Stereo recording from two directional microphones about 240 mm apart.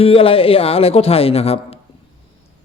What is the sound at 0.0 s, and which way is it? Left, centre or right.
Speech, left.